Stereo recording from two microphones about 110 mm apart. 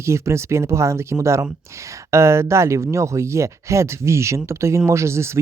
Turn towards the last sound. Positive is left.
turn(degrees=-25)  # may be behind; listen again after turning